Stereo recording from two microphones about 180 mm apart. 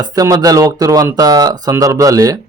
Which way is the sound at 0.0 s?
20° right (ahead or behind).